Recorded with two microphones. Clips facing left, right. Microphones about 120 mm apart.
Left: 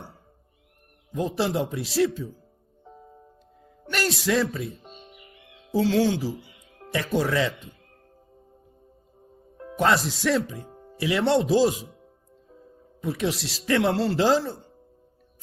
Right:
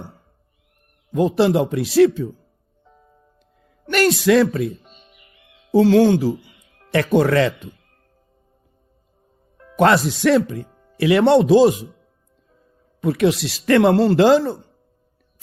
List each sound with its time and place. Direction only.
1.4 s speech: 65° right (ahead or behind)
2.8 s music: 25° left (ahead or behind)
3.8 s music: 65° right (ahead or behind)
4.2 s speech: 65° right (ahead or behind)
4.8 s music: 25° left (ahead or behind)
5.7 s speech: 60° right (ahead or behind)
9.7 s speech: 65° right (ahead or behind)
10.7 s music: 30° left (ahead or behind)
10.9 s speech: 65° right (ahead or behind)
13.0 s speech: 65° right (ahead or behind)